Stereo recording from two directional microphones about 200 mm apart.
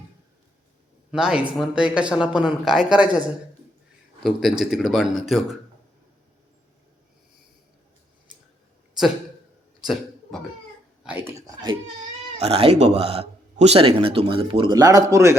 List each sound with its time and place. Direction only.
1.1 s speech: 5° right (ahead or behind)
9.8 s cough: centre (ahead or behind)
11.0 s speech: 5° right (ahead or behind)
11.4 s speech: 20° right (ahead or behind)